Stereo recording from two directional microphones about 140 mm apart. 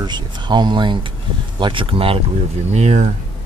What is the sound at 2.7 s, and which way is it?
Speech, 55° right (ahead or behind).